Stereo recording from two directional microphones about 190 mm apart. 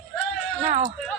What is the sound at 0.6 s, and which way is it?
Speech, 35° right (ahead or behind).